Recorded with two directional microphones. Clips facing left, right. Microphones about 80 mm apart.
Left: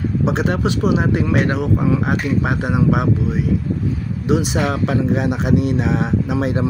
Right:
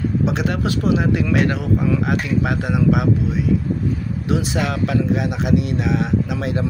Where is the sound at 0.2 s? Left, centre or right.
Left.